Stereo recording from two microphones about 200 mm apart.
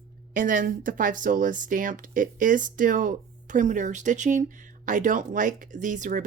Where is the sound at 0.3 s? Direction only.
40° right (ahead or behind).